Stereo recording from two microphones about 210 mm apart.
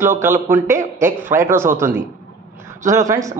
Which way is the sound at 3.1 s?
15° right (ahead or behind).